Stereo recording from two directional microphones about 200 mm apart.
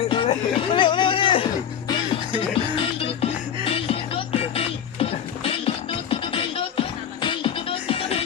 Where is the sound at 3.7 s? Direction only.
30° left (ahead or behind).